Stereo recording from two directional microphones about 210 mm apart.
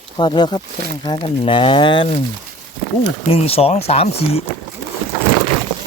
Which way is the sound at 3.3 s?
30° left (ahead or behind).